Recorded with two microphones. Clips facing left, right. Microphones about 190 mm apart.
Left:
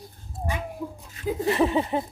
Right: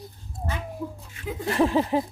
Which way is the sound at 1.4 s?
Centre (ahead or behind).